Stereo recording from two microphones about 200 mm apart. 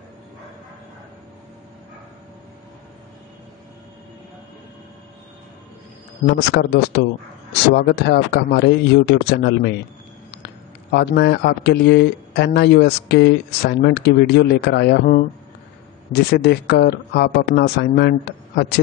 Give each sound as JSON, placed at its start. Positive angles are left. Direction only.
{"t": 6.2, "sound": "speech", "side_deg": 55}